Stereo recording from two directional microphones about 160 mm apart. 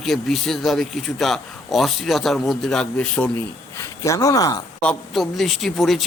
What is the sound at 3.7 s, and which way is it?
Speech, 20° left (ahead or behind).